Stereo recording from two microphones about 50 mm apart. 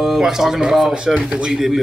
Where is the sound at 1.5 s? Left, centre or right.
Centre.